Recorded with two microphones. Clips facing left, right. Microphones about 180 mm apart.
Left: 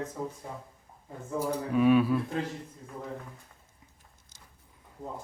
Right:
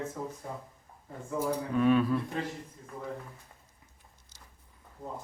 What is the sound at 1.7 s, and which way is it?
Speech, 10° left (ahead or behind).